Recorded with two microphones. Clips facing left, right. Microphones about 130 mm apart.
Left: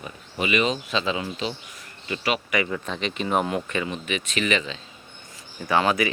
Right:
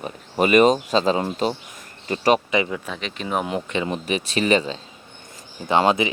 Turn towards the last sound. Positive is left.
turn(degrees=-25)  # may be behind; listen again after turning